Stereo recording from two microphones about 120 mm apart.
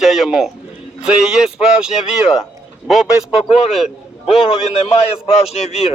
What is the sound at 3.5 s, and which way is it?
A man's voice, 55° left (ahead or behind).